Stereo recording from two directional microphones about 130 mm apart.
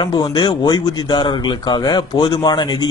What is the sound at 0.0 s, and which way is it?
Speech, 35° left (ahead or behind).